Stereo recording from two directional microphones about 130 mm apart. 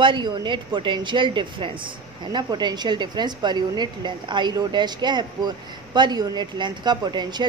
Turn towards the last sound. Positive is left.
turn(degrees=-35)  # may be behind; listen again after turning